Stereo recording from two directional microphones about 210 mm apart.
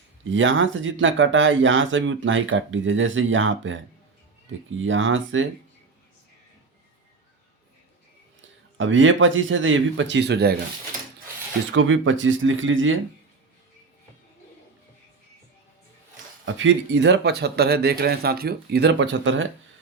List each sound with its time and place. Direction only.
0.3 s speech: 65° right (ahead or behind)
4.8 s speech: 65° right (ahead or behind)
8.8 s speech: 65° right (ahead or behind)
11.7 s speech: 65° right (ahead or behind)
16.5 s speech: 60° right (ahead or behind)